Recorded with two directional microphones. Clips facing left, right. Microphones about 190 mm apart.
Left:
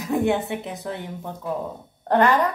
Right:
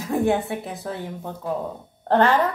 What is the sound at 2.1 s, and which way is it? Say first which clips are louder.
Speech: even; 15° left (ahead or behind).